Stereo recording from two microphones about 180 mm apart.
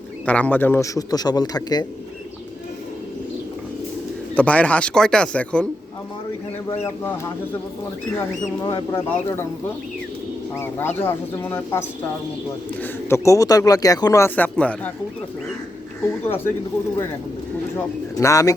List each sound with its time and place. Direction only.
0.3 s a man's voice: 10° left (ahead or behind)
4.4 s speech: 10° left (ahead or behind)
8.6 s speech: 15° left (ahead or behind)
10.6 s speech: 10° left (ahead or behind)
12.8 s speech: 15° left (ahead or behind)
16.2 s speech: 10° left (ahead or behind)
17.7 s speech: 15° left (ahead or behind)